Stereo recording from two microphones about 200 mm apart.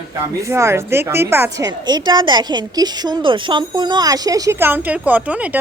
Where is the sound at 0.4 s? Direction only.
15° right (ahead or behind).